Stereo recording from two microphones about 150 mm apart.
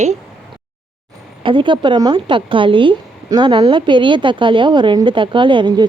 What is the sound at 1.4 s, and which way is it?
A woman's voice, 35° right (ahead or behind).